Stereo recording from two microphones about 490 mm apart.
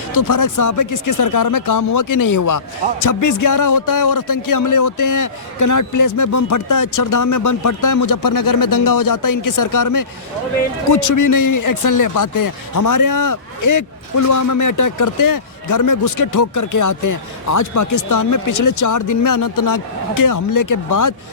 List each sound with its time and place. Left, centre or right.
0.1 s speech: left